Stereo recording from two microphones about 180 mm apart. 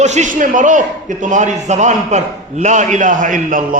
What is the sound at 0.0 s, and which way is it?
A man's voice, 40° right (ahead or behind).